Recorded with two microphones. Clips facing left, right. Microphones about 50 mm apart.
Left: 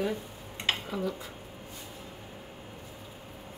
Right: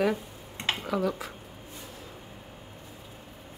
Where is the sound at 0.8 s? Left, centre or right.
Right.